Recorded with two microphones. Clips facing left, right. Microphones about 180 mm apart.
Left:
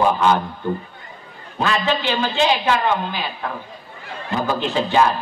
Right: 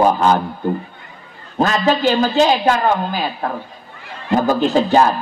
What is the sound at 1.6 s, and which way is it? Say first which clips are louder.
Speech: right 5 dB; 40° right (ahead or behind).